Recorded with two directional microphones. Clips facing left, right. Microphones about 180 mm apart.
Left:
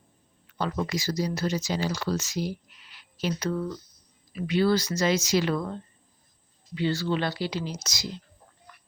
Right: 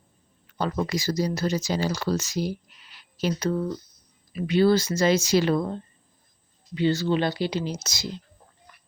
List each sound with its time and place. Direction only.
0.6 s speech: 40° right (ahead or behind)
2.9 s a sound: 40° right (ahead or behind)
4.4 s speech: 25° right (ahead or behind)
6.7 s speech: 20° right (ahead or behind)